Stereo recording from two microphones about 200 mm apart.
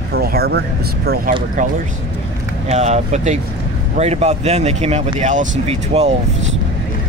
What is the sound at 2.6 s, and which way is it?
Speech, 35° right (ahead or behind).